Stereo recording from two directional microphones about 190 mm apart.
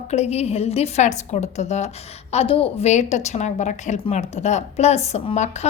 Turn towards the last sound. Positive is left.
turn(degrees=35)  # may be behind; listen again after turning